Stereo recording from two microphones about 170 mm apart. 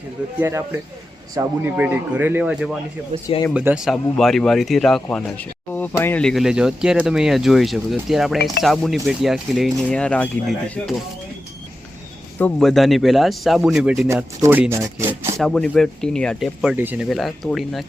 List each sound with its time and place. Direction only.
0.3 s speech: 15° right (ahead or behind)
3.2 s speech: 20° left (ahead or behind)
3.5 s speech: 10° right (ahead or behind)
12.4 s speech: 5° left (ahead or behind)
14.1 s speech: 15° right (ahead or behind)
15.4 s speech: 5° left (ahead or behind)
17.1 s speech: centre (ahead or behind)